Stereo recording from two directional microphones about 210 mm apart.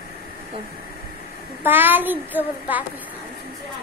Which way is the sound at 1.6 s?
10° right (ahead or behind).